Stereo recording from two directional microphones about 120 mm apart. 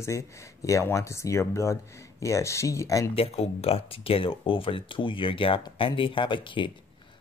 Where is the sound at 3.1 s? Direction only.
55° left (ahead or behind).